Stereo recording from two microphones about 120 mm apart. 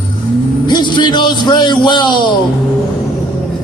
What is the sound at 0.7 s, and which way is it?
A man's voice, 40° left (ahead or behind).